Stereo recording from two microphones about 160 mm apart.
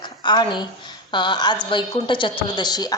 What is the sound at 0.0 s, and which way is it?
A woman's voice, 30° left (ahead or behind).